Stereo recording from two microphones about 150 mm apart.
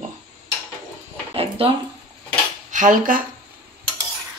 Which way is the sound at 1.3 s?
40° right (ahead or behind).